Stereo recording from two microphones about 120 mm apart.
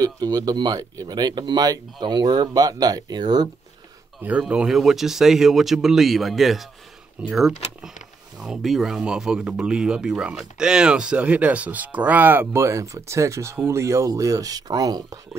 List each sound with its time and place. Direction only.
0.0 s speech: 30° right (ahead or behind)
4.2 s speech: 10° right (ahead or behind); by 15.1 s 30° right (ahead or behind)